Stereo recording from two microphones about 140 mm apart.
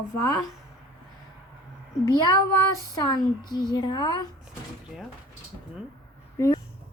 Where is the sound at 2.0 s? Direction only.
30° left (ahead or behind).